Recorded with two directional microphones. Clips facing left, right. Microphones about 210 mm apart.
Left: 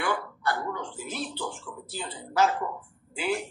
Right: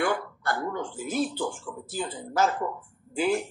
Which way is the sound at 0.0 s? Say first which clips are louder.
Right 2 dB; 50° right (ahead or behind).